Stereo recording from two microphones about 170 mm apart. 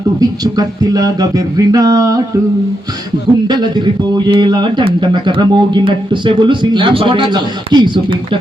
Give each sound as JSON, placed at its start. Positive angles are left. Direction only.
{"t": 0.2, "sound": "speech", "side_deg": -20}
{"t": 3.4, "sound": "speech", "side_deg": -25}